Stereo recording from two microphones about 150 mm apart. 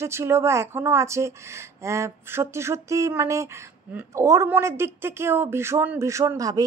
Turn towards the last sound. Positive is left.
turn(degrees=-25)  # may be behind; listen again after turning